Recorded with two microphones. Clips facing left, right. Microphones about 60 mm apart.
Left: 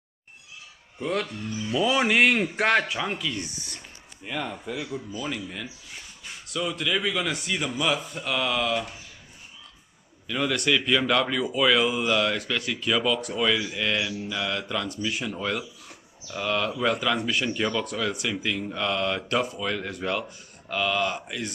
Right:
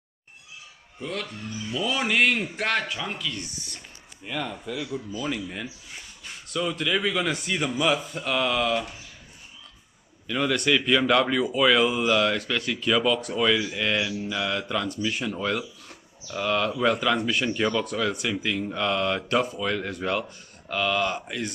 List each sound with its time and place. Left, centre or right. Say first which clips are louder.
1.0 s speech: left 4 dB; centre
5.3 s speech: right 2 dB; centre
6.2 s speech: right 1 dB; centre
10.2 s speech: right 1 dB; centre